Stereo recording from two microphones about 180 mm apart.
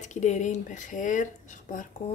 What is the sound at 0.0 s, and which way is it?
A woman's voice, 40° left (ahead or behind).